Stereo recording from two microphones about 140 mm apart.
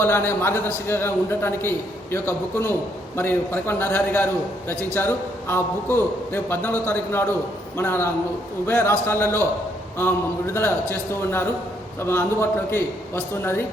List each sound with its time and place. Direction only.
0.0 s a man's voice: 15° left (ahead or behind)